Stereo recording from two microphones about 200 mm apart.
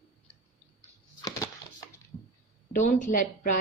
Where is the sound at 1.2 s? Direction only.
15° left (ahead or behind).